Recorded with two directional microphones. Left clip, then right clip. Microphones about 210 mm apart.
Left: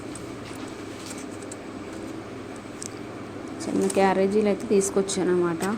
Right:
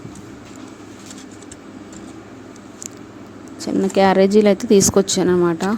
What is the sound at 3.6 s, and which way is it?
Speech, 45° right (ahead or behind).